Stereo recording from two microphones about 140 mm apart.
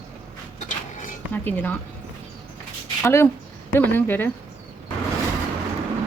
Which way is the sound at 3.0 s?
20° left (ahead or behind).